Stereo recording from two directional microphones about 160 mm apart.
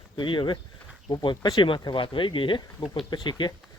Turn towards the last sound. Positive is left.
turn(degrees=25)  # may be behind; listen again after turning